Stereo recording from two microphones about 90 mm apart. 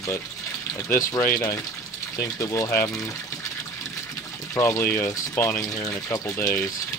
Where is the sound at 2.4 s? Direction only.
40° left (ahead or behind).